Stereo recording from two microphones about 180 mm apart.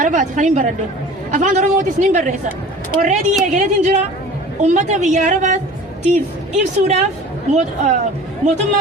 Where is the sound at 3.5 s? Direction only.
40° right (ahead or behind).